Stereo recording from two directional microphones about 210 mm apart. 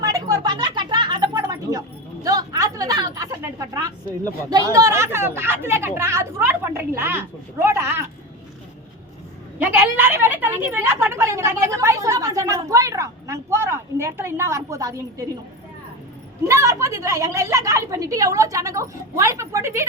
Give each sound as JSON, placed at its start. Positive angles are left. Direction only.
{"t": 0.0, "sound": "a sound", "side_deg": -15}
{"t": 4.4, "sound": "a woman's voice", "side_deg": -20}
{"t": 9.6, "sound": "a woman's voice", "side_deg": -10}
{"t": 16.5, "sound": "a woman's voice", "side_deg": -15}